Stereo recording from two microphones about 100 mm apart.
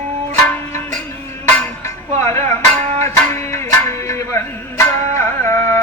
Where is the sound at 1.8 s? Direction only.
25° left (ahead or behind).